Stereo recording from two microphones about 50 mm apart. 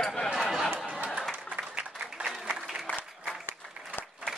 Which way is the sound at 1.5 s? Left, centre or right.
Right.